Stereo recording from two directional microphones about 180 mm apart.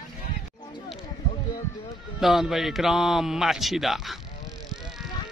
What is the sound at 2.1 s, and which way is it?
Speech, centre (ahead or behind).